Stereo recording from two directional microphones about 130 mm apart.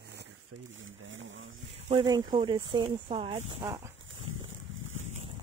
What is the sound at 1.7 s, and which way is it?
Speech, 45° right (ahead or behind).